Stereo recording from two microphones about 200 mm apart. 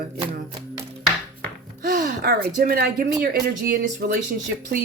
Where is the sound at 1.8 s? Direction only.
45° right (ahead or behind).